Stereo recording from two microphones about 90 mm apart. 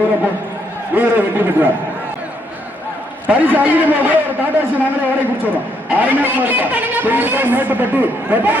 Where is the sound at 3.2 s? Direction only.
20° right (ahead or behind).